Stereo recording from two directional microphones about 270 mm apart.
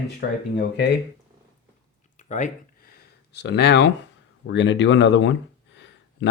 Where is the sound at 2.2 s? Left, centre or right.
Left.